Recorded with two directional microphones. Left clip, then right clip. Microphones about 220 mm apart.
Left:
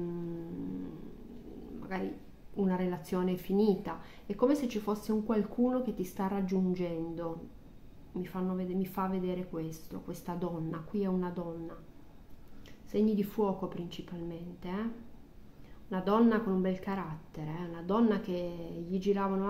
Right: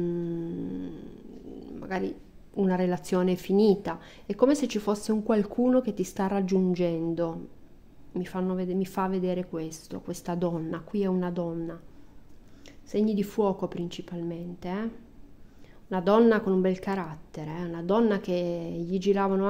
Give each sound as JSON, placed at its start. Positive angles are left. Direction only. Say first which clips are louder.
{"t": 1.8, "sound": "a sound", "louder": "right 7 dB", "side_deg": -45}
{"t": 2.5, "sound": "a woman's voice", "louder": "right 7 dB", "side_deg": -45}
{"t": 15.9, "sound": "a woman's voice", "louder": "right 7 dB", "side_deg": -45}